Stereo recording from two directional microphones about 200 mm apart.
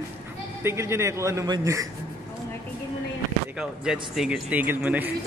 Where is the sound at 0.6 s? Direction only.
15° right (ahead or behind).